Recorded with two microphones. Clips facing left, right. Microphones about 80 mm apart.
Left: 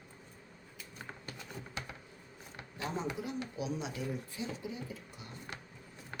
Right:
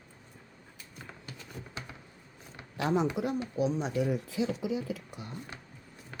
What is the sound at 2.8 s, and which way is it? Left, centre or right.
Speech, right.